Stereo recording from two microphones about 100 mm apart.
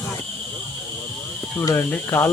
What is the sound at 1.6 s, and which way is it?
Speech, 30° left (ahead or behind).